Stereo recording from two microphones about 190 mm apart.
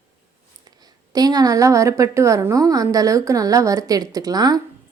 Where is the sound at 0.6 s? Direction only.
20° right (ahead or behind).